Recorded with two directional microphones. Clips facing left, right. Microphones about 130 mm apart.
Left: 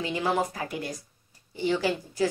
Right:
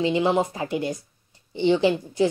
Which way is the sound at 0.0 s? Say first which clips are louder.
Right 6 dB; 20° right (ahead or behind).